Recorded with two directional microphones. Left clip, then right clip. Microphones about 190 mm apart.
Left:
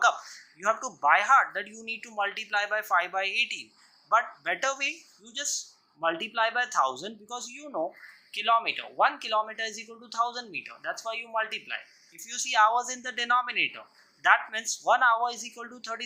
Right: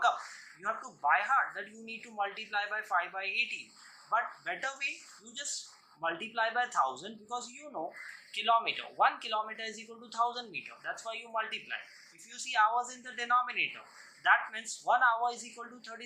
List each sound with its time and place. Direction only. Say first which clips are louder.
0.6 s speech: left 7 dB; 40° left (ahead or behind)